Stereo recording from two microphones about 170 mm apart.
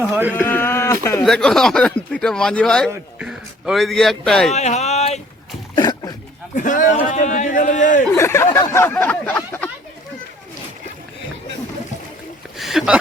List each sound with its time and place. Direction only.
0.1 s speech: 10° right (ahead or behind)
0.3 s speech: 10° left (ahead or behind)
1.2 s a man's voice: centre (ahead or behind)
4.5 s a sound: 40° left (ahead or behind)
5.7 s a sound: 25° left (ahead or behind)
6.6 s a man's voice: 50° left (ahead or behind)
8.1 s speech: 15° left (ahead or behind)
8.5 s a sound: 15° left (ahead or behind)
12.5 s speech: centre (ahead or behind)